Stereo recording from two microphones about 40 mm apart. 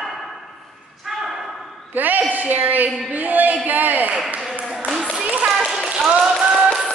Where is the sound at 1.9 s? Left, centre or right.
Right.